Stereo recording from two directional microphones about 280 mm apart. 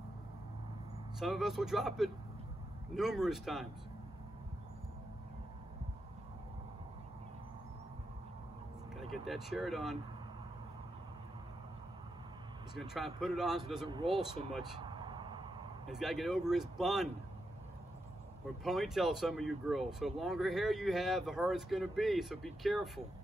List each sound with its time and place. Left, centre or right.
1.2 s speech: centre
8.9 s speech: centre
12.7 s speech: centre
14.6 s a sound: centre
15.9 s speech: centre
18.6 s speech: centre